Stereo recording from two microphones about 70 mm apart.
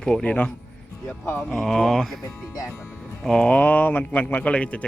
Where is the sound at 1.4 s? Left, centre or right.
Centre.